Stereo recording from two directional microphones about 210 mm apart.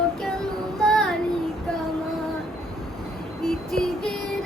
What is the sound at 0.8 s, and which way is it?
Child singing, centre (ahead or behind).